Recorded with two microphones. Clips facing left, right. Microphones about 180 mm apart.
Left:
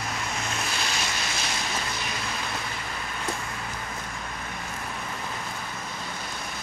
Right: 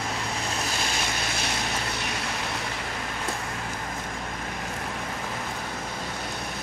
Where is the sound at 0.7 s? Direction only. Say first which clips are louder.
Right 2 dB; 50° right (ahead or behind).